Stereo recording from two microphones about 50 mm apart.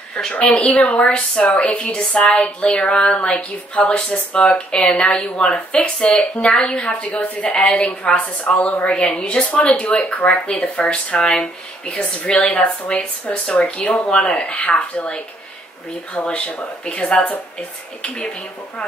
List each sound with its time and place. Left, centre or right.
0.3 s a woman's voice: left
7.1 s a woman's voice: left
14.4 s a woman's voice: left